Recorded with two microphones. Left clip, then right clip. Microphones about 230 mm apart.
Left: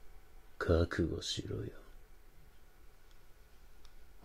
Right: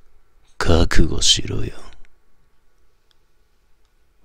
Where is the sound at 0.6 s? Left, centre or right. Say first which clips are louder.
Right 13 dB; right.